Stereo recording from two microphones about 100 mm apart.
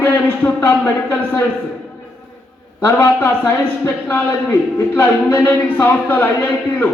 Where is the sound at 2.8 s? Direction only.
25° left (ahead or behind).